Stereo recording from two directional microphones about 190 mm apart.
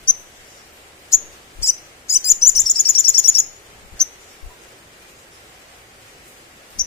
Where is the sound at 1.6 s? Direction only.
15° left (ahead or behind).